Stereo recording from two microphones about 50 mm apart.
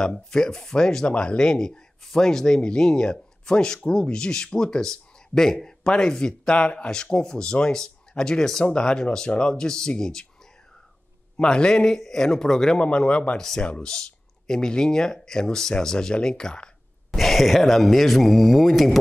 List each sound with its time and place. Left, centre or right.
0.3 s speech: centre
11.3 s speech: centre
12.8 s speech: left
17.1 s speech: centre